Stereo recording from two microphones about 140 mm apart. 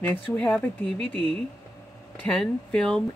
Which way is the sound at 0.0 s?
10° left (ahead or behind).